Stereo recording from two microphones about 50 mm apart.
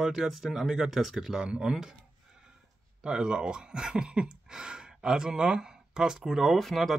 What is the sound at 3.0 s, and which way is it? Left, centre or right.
Speech, centre.